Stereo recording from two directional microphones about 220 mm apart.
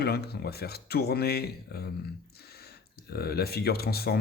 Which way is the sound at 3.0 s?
45° left (ahead or behind).